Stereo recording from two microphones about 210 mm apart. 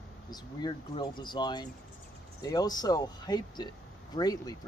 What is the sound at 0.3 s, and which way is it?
Speech, 20° left (ahead or behind).